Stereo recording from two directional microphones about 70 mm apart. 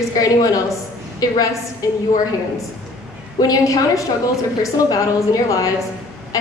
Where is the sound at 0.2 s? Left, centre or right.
Left.